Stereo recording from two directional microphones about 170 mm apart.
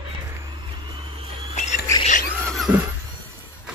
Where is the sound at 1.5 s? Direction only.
40° left (ahead or behind).